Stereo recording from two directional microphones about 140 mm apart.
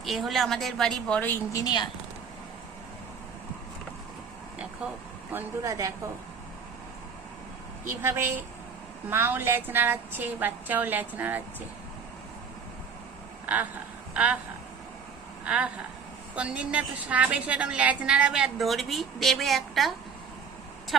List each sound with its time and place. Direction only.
0.0 s a woman's voice: centre (ahead or behind)
1.5 s a woman's voice: 30° left (ahead or behind)
5.3 s speech: 20° right (ahead or behind)
7.9 s a woman's voice: 15° right (ahead or behind)
14.1 s a sound: 10° right (ahead or behind)
15.4 s a woman's voice: 10° right (ahead or behind)